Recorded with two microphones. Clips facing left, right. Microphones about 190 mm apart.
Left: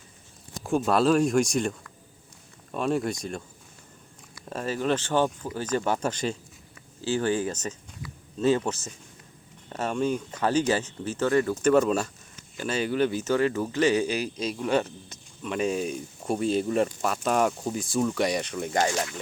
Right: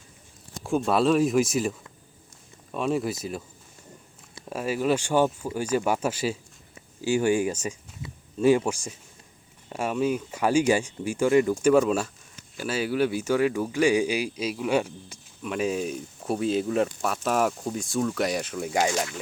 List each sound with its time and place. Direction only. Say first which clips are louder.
0.6 s speech: even; centre (ahead or behind)
2.7 s speech: even; centre (ahead or behind)
4.4 s speech: right 2 dB; 10° right (ahead or behind)